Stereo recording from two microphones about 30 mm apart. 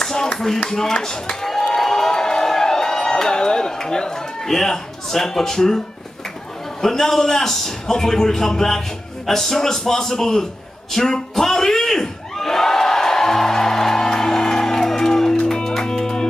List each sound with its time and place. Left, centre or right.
0.0 s speech: centre
1.8 s a sound: centre
4.5 s speech: centre
6.8 s speech: centre
8.2 s a sound: centre
15.4 s music: centre